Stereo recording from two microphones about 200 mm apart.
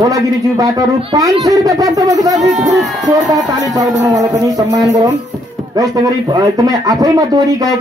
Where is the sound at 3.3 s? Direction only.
20° right (ahead or behind).